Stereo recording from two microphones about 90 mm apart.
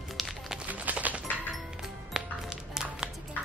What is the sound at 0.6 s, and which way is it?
Chopping, 15° right (ahead or behind).